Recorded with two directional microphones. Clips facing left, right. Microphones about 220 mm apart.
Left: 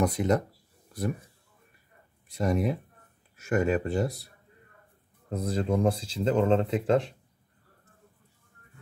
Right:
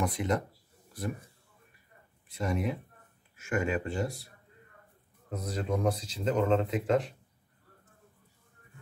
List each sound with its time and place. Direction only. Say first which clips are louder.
0.0 s speech: left 5 dB; 40° left (ahead or behind)
2.2 s speech: left 5 dB; 40° left (ahead or behind)
5.3 s speech: left 5 dB; 30° left (ahead or behind)